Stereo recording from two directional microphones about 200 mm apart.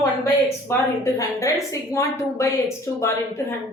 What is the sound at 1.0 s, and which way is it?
Speech, 15° left (ahead or behind).